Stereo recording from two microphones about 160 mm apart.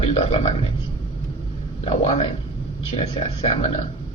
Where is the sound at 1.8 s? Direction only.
40° left (ahead or behind).